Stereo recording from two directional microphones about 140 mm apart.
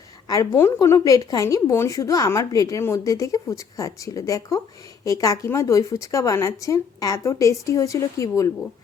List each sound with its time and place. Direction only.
0.3 s a woman's voice: 20° left (ahead or behind)